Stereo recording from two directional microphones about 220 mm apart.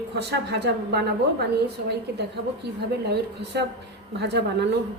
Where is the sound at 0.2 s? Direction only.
50° right (ahead or behind).